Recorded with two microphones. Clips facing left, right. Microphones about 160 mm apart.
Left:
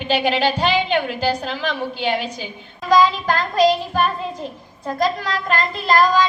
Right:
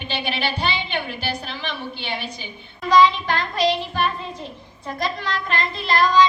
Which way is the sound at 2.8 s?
45° left (ahead or behind).